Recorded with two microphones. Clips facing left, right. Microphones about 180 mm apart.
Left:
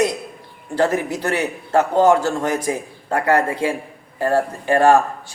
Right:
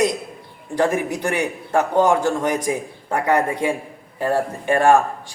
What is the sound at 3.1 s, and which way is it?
Speech, 20° right (ahead or behind).